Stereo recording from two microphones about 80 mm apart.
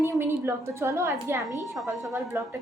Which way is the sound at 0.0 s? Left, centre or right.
Right.